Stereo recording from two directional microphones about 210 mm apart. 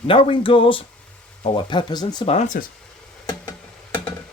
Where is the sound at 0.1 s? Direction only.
25° left (ahead or behind).